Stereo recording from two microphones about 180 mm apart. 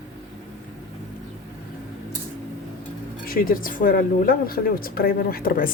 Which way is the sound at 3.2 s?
55° left (ahead or behind).